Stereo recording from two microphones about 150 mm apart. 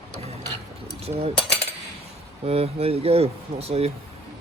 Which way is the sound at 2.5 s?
40° right (ahead or behind).